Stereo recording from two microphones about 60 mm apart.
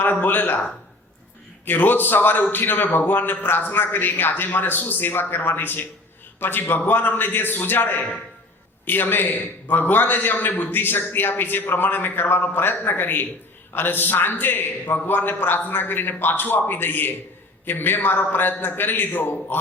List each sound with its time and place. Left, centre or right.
0.0 s a man's voice: left
1.6 s a man's voice: left